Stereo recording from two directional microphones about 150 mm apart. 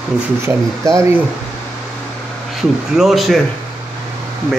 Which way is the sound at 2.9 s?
Centre (ahead or behind).